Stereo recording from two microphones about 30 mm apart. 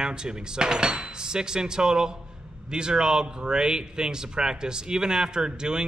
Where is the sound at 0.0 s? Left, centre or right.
Right.